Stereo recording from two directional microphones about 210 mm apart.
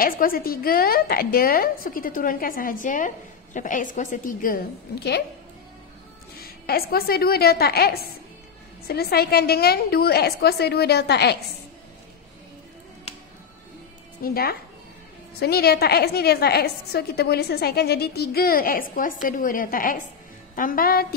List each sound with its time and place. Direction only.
0.0 s a woman's voice: 45° left (ahead or behind)
6.4 s a woman's voice: 45° left (ahead or behind)
14.2 s a woman's voice: 45° left (ahead or behind)